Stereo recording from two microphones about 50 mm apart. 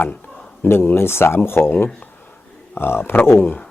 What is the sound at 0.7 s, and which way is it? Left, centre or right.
Speech, left.